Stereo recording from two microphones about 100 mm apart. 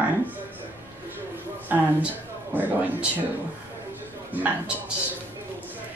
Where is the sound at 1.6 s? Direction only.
15° right (ahead or behind).